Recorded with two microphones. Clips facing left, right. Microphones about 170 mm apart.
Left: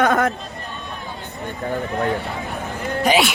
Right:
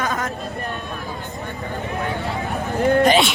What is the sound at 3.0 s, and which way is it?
Speech, 5° left (ahead or behind).